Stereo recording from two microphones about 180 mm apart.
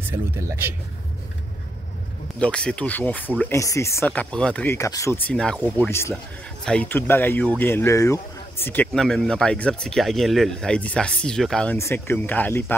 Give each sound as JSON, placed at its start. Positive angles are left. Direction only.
{"t": 0.1, "sound": "speech", "side_deg": -15}
{"t": 2.3, "sound": "speech", "side_deg": 5}
{"t": 4.0, "sound": "speech", "side_deg": 5}
{"t": 5.9, "sound": "speech", "side_deg": 15}